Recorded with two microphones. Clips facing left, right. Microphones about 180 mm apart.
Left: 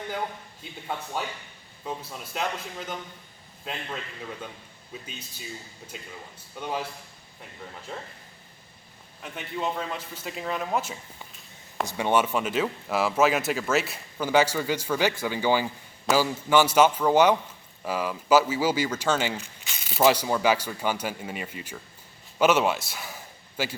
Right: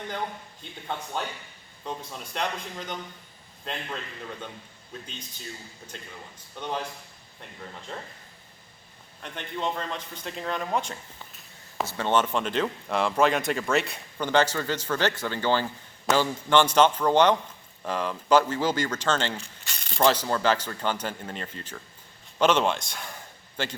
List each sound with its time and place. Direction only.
0.6 s a man's voice: 5° left (ahead or behind)
6.6 s a man's voice: 5° left (ahead or behind)
9.2 s speech: 5° left (ahead or behind)
11.9 s a man's voice: 10° left (ahead or behind)